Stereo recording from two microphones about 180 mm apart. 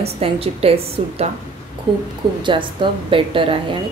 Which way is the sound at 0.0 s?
35° right (ahead or behind).